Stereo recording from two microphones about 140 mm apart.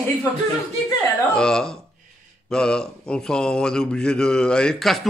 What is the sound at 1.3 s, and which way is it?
Speech, 5° left (ahead or behind).